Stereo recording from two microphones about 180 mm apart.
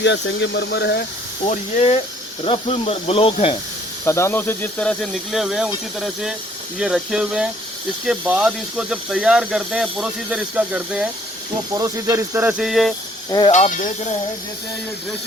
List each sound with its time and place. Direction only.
0.0 s speech: 80° left
1.5 s speech: 35° left (ahead or behind)
4.0 s speech: 15° left (ahead or behind); by 12.9 s centre (ahead or behind)
13.5 s speech: 45° left (ahead or behind)